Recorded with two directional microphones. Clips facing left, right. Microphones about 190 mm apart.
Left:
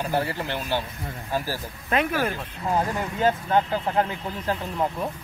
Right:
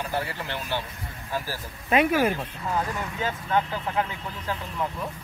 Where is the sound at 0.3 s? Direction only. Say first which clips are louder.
Left 4 dB; 35° left (ahead or behind).